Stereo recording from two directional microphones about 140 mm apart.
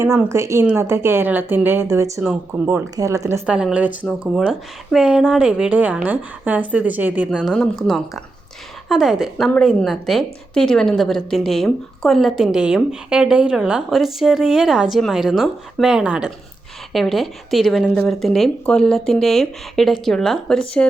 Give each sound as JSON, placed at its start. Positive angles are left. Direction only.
{"t": 0.0, "sound": "a woman's voice", "side_deg": -20}
{"t": 3.4, "sound": "a woman's voice", "side_deg": -5}
{"t": 7.3, "sound": "a woman's voice", "side_deg": 0}